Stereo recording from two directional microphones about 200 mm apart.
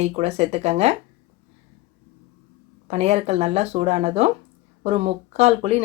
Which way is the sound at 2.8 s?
30° right (ahead or behind).